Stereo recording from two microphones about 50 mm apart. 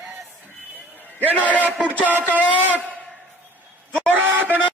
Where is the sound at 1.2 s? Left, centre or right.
Left.